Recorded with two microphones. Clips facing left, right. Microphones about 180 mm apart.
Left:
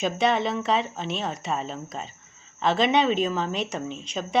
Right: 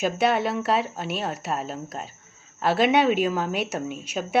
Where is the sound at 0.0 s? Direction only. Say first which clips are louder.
Right 1 dB; 5° right (ahead or behind).